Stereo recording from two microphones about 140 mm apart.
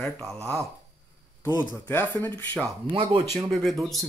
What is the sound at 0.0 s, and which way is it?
Speech, 5° left (ahead or behind).